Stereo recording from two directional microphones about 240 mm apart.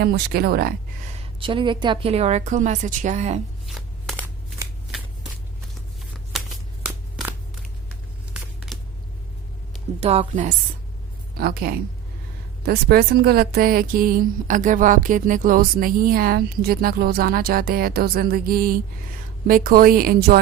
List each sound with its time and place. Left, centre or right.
0.0 s speech: right
1.4 s a woman's voice: right
3.7 s shuffling cards: centre
6.8 s a sound: centre
10.0 s a woman's voice: right
11.3 s speech: right